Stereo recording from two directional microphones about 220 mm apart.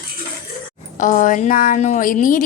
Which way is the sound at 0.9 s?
35° left (ahead or behind).